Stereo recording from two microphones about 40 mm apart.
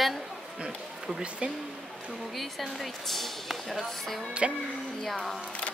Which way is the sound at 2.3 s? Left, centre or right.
Centre.